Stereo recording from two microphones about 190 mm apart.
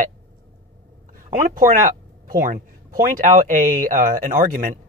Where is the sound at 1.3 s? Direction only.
45° right (ahead or behind).